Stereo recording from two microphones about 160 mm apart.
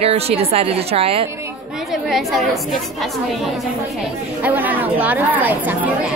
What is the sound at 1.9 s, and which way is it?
A woman's voice, centre (ahead or behind).